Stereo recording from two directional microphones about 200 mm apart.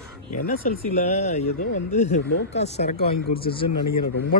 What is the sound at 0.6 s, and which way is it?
Speech, 40° left (ahead or behind).